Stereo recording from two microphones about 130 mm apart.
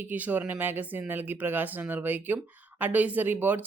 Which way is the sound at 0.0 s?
15° right (ahead or behind).